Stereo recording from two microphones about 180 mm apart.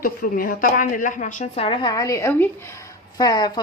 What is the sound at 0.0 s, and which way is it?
A woman's voice, 50° left (ahead or behind).